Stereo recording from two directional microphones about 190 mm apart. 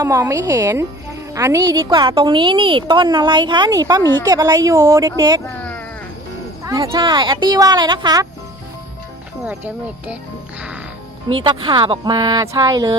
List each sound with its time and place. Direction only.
0.0 s a woman's voice: 15° right (ahead or behind)
6.7 s a woman's voice: 15° right (ahead or behind)
9.4 s speech: 5° right (ahead or behind)
11.3 s a woman's voice: 25° right (ahead or behind)